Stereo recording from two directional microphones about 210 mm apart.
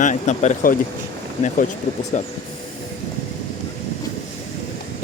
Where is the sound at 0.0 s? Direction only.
35° left (ahead or behind).